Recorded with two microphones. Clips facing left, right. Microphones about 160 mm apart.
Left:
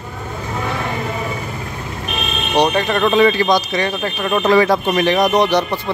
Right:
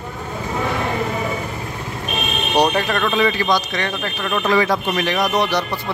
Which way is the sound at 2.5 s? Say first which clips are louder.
Left 2 dB; 5° right (ahead or behind).